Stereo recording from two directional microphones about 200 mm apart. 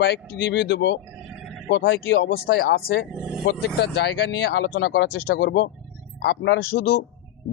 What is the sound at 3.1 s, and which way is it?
Speech, 5° right (ahead or behind).